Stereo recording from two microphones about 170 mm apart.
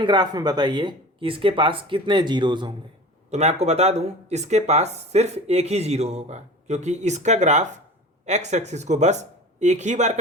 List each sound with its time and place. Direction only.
0.0 s speech: 25° right (ahead or behind)
3.3 s speech: 40° right (ahead or behind)